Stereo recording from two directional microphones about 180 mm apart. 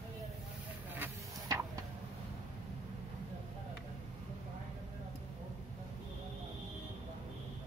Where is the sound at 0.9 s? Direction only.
15° right (ahead or behind).